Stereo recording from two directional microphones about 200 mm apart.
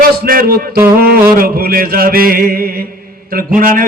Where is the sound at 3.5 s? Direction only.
45° right (ahead or behind).